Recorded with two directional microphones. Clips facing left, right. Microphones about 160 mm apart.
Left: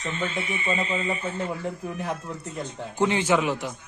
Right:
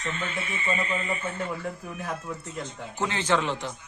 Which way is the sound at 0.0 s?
20° left (ahead or behind).